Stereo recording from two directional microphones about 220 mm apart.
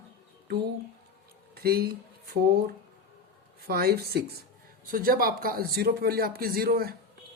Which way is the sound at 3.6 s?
45° right (ahead or behind).